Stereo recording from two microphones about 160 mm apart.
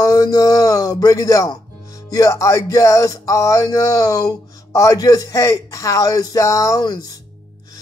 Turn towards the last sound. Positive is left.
turn(degrees=25)  # may be behind; listen again after turning